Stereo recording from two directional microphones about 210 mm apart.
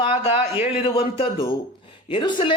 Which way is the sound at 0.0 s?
25° left (ahead or behind).